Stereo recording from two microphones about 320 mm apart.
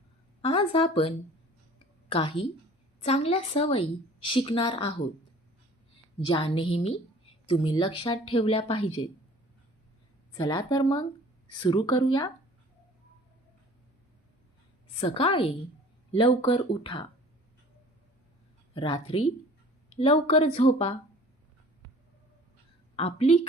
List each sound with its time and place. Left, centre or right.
0.4 s a woman's voice: centre
6.1 s a woman's voice: centre
10.3 s a woman's voice: centre
14.9 s a woman's voice: centre
18.7 s a woman's voice: centre
23.0 s a woman's voice: centre